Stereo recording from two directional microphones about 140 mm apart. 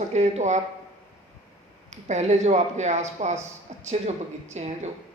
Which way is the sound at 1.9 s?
55° right (ahead or behind).